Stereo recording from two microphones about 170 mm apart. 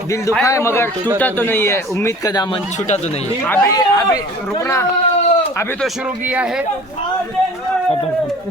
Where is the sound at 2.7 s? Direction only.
45° left (ahead or behind).